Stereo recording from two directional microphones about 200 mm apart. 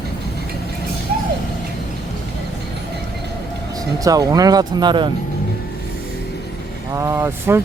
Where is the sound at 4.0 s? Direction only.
20° right (ahead or behind).